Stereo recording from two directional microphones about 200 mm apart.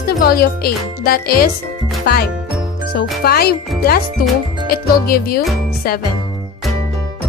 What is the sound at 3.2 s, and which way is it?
Speech, 50° left (ahead or behind).